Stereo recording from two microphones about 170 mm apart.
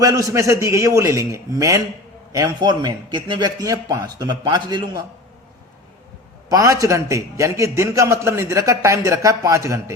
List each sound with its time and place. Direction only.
0.0 s a man's voice: 20° right (ahead or behind)
6.5 s a man's voice: 20° right (ahead or behind)